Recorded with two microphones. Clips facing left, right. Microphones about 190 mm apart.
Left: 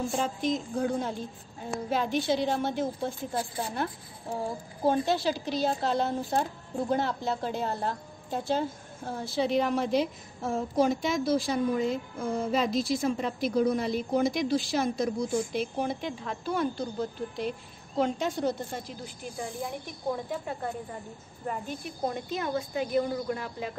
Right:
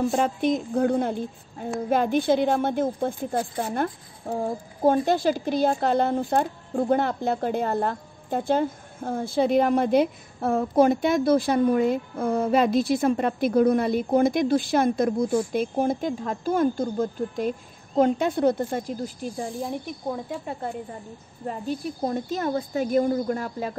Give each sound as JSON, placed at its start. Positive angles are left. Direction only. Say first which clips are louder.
{"t": 0.1, "sound": "a woman's voice", "louder": "right 6 dB", "side_deg": -60}
{"t": 19.0, "sound": "speech", "louder": "right 6 dB", "side_deg": -35}
{"t": 22.0, "sound": "a woman's voice", "louder": "right 4 dB", "side_deg": -45}